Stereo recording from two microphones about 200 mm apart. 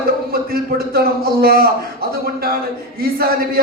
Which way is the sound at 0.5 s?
50° right (ahead or behind).